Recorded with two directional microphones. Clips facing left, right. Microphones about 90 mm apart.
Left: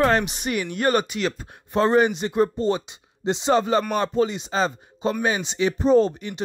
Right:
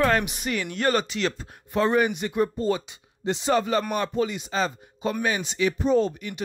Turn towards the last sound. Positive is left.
turn(degrees=35)  # may be behind; listen again after turning